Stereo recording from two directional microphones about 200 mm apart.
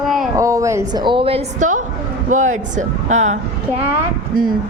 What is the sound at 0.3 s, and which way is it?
A woman's voice, 15° right (ahead or behind).